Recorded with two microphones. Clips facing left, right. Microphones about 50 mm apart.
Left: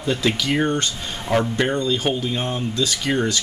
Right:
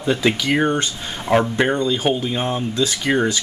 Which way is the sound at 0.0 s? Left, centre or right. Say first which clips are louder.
Right 3 dB; right.